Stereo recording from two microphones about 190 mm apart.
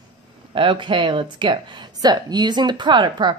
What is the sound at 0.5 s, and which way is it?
Speech, 25° right (ahead or behind).